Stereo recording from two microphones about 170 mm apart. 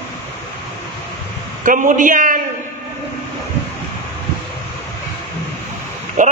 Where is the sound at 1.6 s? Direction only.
50° right (ahead or behind).